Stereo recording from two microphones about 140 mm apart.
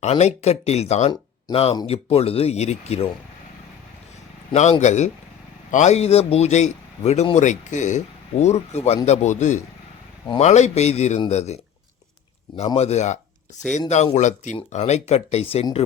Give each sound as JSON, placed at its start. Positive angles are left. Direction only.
{"t": 0.0, "sound": "a man's voice", "side_deg": 55}
{"t": 4.5, "sound": "a man's voice", "side_deg": 55}
{"t": 12.7, "sound": "a man's voice", "side_deg": 50}